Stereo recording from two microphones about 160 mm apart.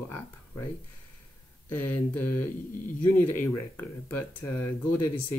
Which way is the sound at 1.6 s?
15° left (ahead or behind).